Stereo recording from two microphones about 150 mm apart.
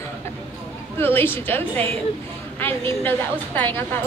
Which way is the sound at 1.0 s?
15° left (ahead or behind).